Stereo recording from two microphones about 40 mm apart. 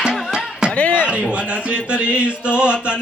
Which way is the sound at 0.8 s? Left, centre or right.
Left.